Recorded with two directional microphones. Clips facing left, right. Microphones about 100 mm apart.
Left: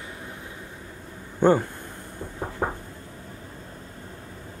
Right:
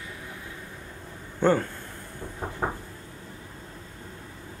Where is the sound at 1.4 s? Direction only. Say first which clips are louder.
Left 3 dB; 15° left (ahead or behind).